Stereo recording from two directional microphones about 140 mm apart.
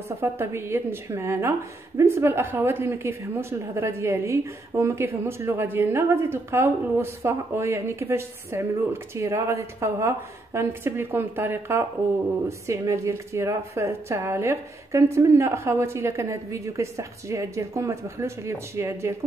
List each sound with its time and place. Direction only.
0.2 s a woman's voice: 15° right (ahead or behind)